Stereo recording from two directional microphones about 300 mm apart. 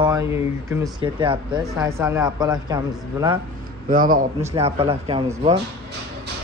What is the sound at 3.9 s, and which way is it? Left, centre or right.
A man's voice, right.